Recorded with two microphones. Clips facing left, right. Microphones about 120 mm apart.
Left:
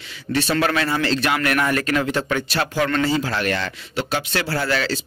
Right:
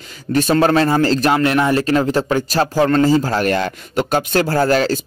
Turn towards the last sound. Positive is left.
turn(degrees=-45)  # may be behind; listen again after turning